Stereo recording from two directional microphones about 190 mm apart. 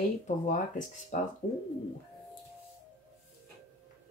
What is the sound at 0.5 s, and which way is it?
Speech, 40° left (ahead or behind).